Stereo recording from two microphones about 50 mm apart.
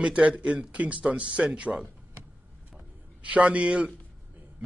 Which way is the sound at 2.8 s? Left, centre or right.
Right.